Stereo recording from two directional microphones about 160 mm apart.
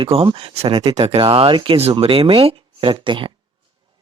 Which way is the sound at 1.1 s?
35° right (ahead or behind).